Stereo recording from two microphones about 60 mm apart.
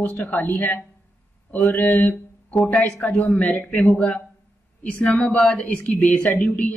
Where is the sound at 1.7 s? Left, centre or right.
Left.